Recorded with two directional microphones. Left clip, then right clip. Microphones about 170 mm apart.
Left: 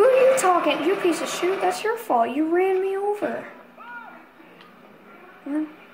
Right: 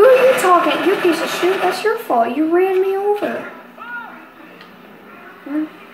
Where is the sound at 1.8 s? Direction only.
70° left (ahead or behind).